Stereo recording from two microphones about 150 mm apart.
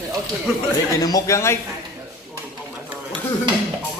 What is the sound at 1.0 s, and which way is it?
Speech, 20° left (ahead or behind).